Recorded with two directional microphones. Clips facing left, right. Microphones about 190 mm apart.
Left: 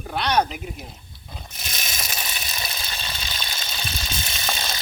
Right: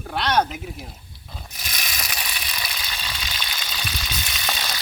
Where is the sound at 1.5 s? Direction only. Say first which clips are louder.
Even; 25° left (ahead or behind).